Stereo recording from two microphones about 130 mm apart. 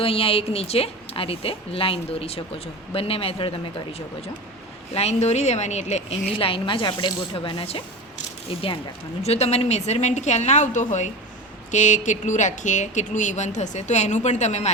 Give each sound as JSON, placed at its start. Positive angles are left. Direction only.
{"t": 0.0, "sound": "a woman's voice", "side_deg": 45}
{"t": 4.9, "sound": "a woman's voice", "side_deg": 60}
{"t": 9.2, "sound": "a woman's voice", "side_deg": 55}